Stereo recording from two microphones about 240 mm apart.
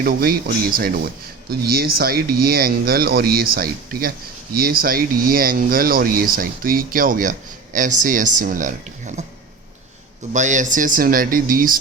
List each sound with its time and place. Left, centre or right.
0.0 s speech: right
10.3 s speech: right